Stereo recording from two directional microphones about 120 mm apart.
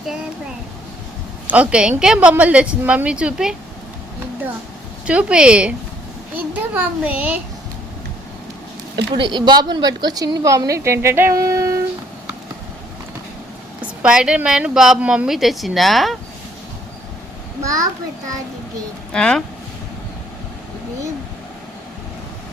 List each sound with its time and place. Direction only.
1.5 s a woman's voice: 10° right (ahead or behind)
5.0 s a woman's voice: 10° right (ahead or behind)
9.1 s a woman's voice: 40° right (ahead or behind)
14.0 s a woman's voice: 5° right (ahead or behind)
17.6 s a child's voice: 30° right (ahead or behind)
19.1 s speech: 5° left (ahead or behind)